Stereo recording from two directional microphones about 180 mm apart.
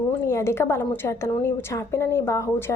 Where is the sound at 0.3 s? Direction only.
15° left (ahead or behind).